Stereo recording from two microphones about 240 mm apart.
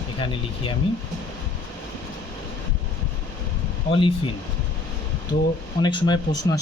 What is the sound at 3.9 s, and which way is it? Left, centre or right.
Speech, left.